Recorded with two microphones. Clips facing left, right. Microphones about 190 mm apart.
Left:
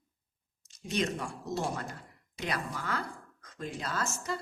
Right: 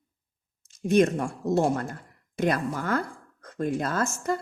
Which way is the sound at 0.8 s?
55° right (ahead or behind).